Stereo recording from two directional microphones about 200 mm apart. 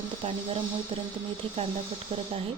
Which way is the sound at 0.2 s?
30° right (ahead or behind).